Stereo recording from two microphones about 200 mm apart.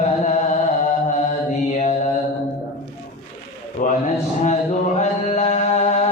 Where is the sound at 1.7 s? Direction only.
35° left (ahead or behind).